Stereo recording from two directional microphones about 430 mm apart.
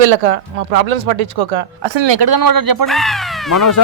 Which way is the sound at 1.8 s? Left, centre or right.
Right.